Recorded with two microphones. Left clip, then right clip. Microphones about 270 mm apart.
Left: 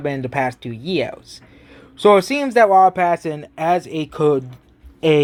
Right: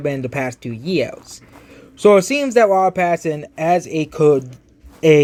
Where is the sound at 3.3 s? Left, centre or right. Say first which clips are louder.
Right 2 dB; left.